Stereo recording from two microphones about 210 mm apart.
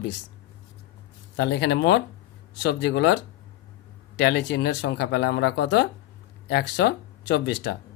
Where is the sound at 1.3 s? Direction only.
55° left (ahead or behind).